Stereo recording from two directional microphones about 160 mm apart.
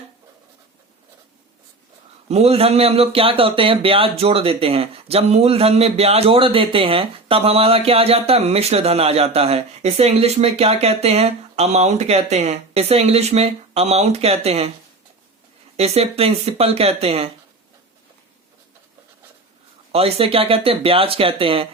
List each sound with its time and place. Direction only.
2.3 s speech: 40° right (ahead or behind)
15.8 s speech: 40° right (ahead or behind)
19.9 s speech: 40° right (ahead or behind)